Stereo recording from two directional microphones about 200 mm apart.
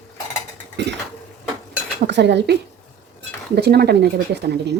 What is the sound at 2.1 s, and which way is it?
Speech, 60° right (ahead or behind).